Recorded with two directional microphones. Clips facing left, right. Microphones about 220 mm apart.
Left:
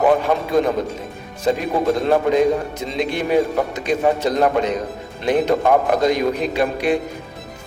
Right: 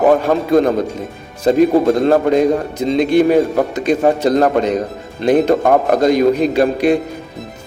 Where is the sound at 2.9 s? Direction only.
45° right (ahead or behind).